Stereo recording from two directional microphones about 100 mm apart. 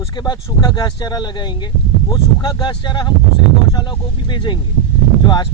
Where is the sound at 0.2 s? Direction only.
45° left (ahead or behind).